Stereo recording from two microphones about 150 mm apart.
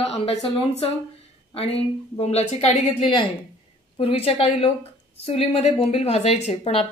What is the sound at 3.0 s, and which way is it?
A woman's voice, 30° left (ahead or behind).